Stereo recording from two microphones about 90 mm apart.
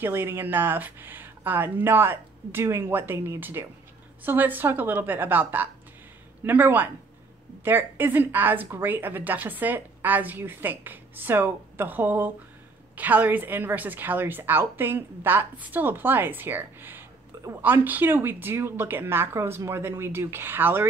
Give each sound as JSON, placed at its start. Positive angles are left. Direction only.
{"t": 0.0, "sound": "a woman's voice", "side_deg": -25}